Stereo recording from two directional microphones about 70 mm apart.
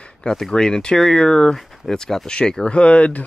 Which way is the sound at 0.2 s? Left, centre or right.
Centre.